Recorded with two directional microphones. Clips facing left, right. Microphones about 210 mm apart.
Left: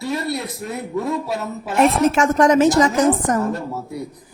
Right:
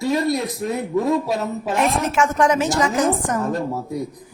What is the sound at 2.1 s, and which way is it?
Speech, 40° left (ahead or behind).